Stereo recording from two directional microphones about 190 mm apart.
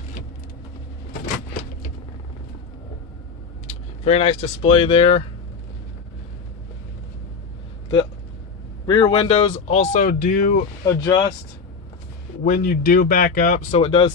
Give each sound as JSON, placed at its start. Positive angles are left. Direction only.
{"t": 4.0, "sound": "speech", "side_deg": 35}
{"t": 8.8, "sound": "speech", "side_deg": 25}
{"t": 10.9, "sound": "speech", "side_deg": 15}
{"t": 12.4, "sound": "speech", "side_deg": 45}
{"t": 13.7, "sound": "speech", "side_deg": 30}